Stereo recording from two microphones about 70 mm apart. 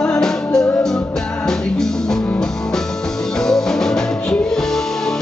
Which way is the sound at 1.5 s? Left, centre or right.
Centre.